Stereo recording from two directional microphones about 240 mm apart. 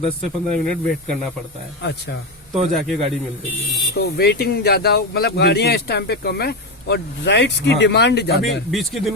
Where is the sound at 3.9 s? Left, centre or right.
Left.